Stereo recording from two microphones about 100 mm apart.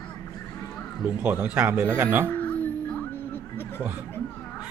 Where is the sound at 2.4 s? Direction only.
15° left (ahead or behind).